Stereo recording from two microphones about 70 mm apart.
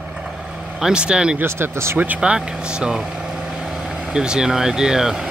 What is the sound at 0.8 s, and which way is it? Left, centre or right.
Speech, centre.